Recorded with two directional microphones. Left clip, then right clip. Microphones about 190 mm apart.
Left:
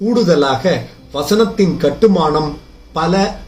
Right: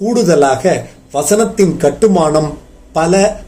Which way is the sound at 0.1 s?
40° right (ahead or behind).